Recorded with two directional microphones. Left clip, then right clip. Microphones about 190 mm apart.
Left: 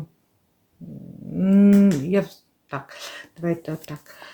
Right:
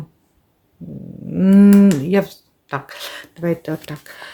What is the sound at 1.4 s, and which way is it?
Speech, 25° right (ahead or behind).